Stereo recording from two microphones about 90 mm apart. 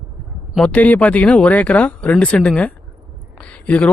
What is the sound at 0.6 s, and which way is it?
Speech, 15° left (ahead or behind).